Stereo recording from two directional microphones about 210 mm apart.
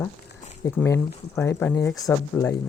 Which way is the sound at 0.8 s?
15° left (ahead or behind).